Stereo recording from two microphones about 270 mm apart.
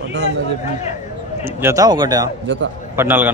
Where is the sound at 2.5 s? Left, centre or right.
Right.